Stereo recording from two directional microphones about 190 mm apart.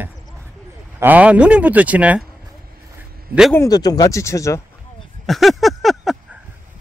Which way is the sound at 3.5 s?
20° left (ahead or behind).